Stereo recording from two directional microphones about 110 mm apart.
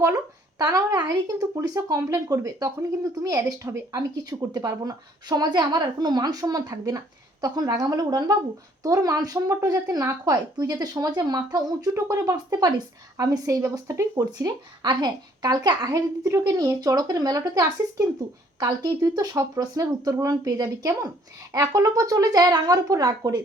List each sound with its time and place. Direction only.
0.6 s a woman's voice: 30° right (ahead or behind)